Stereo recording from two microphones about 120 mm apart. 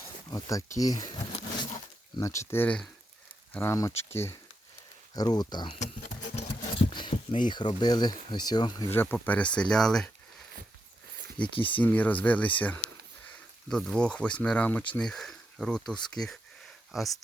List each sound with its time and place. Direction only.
0.3 s speech: 30° left (ahead or behind)
2.1 s speech: 25° left (ahead or behind)
5.1 s speech: 35° left (ahead or behind)
6.3 s speech: 50° left (ahead or behind)
8.9 s speech: 20° left (ahead or behind)
11.4 s speech: 45° left (ahead or behind)
11.8 s speech: 15° left (ahead or behind)